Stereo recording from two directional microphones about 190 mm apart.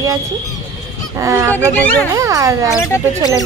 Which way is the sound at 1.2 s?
15° right (ahead or behind).